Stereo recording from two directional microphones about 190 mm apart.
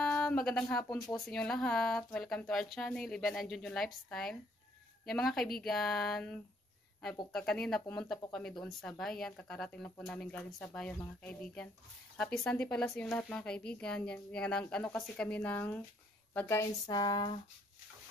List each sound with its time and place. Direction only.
0.0 s a woman's voice: 5° left (ahead or behind); by 17.4 s 20° left (ahead or behind)